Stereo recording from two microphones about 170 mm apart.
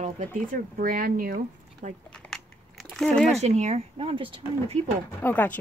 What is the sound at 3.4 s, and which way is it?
Speech, 40° right (ahead or behind).